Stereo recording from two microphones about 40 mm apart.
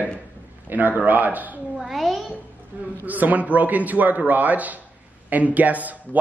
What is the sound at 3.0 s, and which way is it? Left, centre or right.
A man's voice, right.